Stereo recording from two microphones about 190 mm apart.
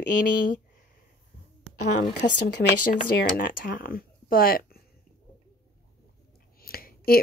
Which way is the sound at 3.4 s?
45° left (ahead or behind).